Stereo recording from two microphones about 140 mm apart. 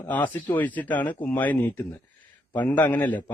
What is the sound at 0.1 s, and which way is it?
A man's voice, 10° left (ahead or behind).